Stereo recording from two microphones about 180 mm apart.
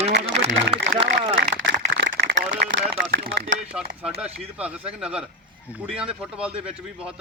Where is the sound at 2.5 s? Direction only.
90° right; by 3.6 s 60° right (ahead or behind).